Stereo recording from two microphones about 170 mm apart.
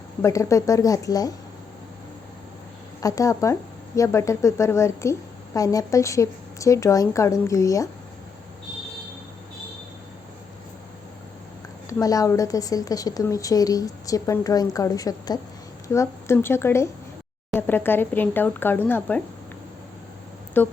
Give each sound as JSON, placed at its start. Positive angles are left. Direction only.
{"t": 0.2, "sound": "a woman's voice", "side_deg": 20}
{"t": 3.0, "sound": "a woman's voice", "side_deg": 20}
{"t": 11.9, "sound": "a woman's voice", "side_deg": 20}
{"t": 20.6, "sound": "a woman's voice", "side_deg": 10}